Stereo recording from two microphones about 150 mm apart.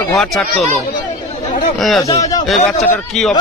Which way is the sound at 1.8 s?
Centre (ahead or behind).